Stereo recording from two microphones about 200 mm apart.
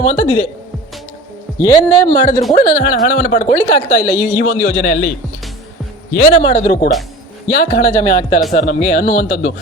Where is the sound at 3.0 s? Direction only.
40° left (ahead or behind).